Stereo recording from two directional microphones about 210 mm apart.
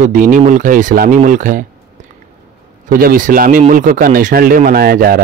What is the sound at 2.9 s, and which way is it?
A man's voice, 45° right (ahead or behind).